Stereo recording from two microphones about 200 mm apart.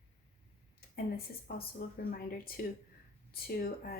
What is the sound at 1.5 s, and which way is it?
Speech, 50° left (ahead or behind).